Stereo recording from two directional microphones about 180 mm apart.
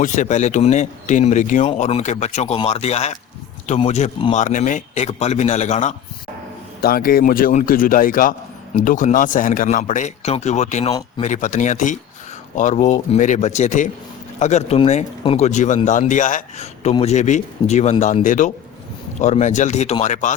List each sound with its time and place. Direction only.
0.0 s speech: 45° left (ahead or behind)
6.8 s a man's voice: 55° left (ahead or behind)